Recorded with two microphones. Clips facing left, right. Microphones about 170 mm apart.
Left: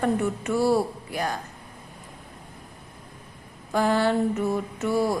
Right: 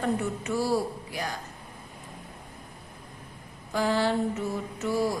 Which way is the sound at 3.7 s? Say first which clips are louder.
Left 3 dB; 55° left (ahead or behind).